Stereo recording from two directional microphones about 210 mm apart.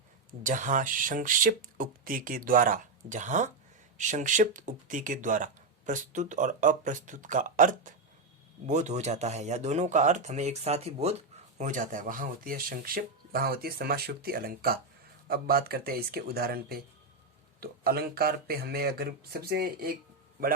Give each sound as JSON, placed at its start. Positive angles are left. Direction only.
{"t": 0.3, "sound": "speech", "side_deg": -40}